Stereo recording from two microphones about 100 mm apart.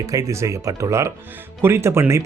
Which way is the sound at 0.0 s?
35° right (ahead or behind).